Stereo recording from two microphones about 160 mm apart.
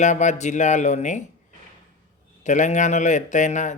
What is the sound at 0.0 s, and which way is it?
Speech, 50° left (ahead or behind).